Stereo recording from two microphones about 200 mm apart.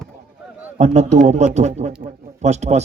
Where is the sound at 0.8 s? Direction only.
35° right (ahead or behind).